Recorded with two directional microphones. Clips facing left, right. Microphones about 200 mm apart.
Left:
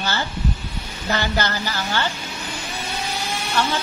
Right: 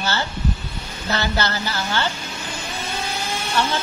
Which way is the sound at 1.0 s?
15° left (ahead or behind).